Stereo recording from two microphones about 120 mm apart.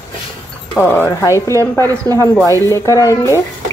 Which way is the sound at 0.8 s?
15° left (ahead or behind).